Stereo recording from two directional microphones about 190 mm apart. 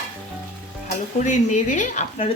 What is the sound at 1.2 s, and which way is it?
Speech, 40° left (ahead or behind).